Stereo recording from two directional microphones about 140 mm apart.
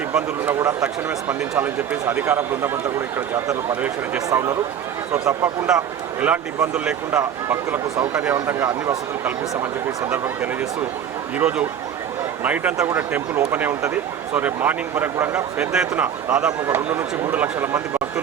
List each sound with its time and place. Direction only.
0.1 s speech: 10° right (ahead or behind)
3.8 s speech: 10° right (ahead or behind)
4.3 s speech: 25° right (ahead or behind)
5.6 s speech: 10° right (ahead or behind)